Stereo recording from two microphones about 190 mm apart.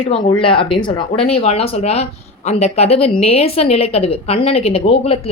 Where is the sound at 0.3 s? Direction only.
25° left (ahead or behind).